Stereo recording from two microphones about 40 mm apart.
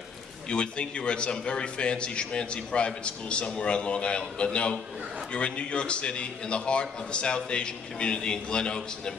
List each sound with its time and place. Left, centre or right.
0.5 s a man's voice: left